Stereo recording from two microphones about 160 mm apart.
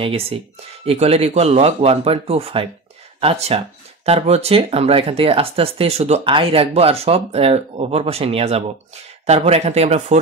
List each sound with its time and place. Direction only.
0.0 s speech: 35° right (ahead or behind)